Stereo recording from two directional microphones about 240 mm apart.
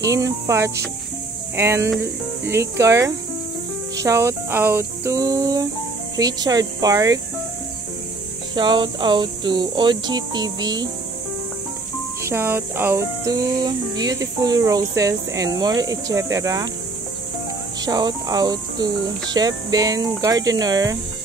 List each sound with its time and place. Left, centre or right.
0.0 s music: centre
8.5 s speech: centre
12.2 s music: centre
17.8 s music: centre